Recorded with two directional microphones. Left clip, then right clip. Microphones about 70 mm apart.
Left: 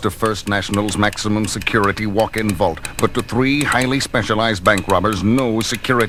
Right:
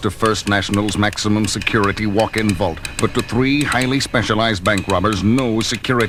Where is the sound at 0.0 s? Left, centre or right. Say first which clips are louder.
Right 2 dB; right.